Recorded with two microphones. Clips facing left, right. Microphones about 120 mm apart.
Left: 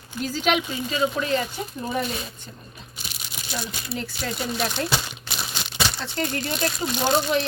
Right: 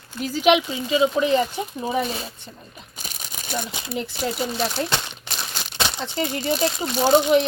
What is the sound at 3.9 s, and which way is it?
Speech, 15° right (ahead or behind).